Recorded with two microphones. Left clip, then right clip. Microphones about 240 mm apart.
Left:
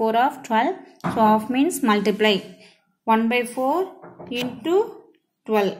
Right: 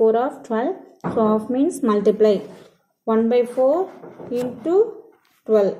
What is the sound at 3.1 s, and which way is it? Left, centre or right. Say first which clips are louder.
Speech: right 4 dB; left.